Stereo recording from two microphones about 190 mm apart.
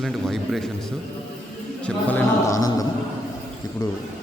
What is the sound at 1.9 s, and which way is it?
Speech, 10° left (ahead or behind).